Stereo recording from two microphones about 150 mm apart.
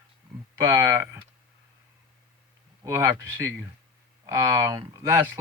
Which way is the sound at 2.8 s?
15° right (ahead or behind).